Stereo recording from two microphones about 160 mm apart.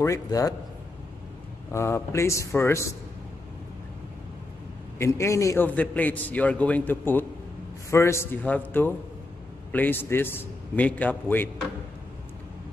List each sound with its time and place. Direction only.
0.0 s a man's voice: 20° left (ahead or behind)
1.7 s a man's voice: 15° left (ahead or behind)
4.9 s a man's voice: 15° left (ahead or behind)